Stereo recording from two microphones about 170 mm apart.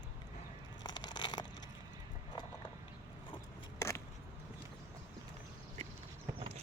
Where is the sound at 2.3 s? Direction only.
25° left (ahead or behind).